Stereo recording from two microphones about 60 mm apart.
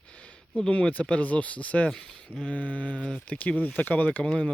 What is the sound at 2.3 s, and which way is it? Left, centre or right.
Speech, left.